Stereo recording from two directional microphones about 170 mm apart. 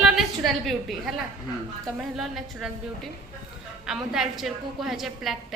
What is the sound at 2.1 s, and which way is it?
Speech, 5° right (ahead or behind).